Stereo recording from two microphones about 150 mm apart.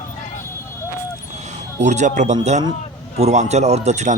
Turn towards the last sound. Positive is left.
turn(degrees=-50)  # may be behind; listen again after turning